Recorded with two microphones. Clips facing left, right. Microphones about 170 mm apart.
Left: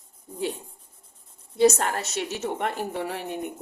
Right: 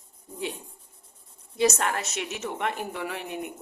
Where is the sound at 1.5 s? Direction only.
30° left (ahead or behind).